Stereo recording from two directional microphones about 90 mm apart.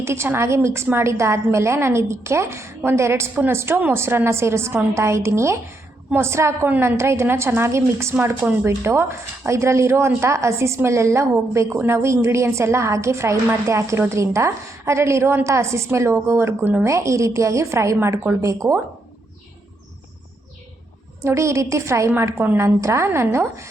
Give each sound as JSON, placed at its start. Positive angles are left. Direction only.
{"t": 0.0, "sound": "a woman's voice", "side_deg": -30}
{"t": 21.2, "sound": "a woman's voice", "side_deg": -35}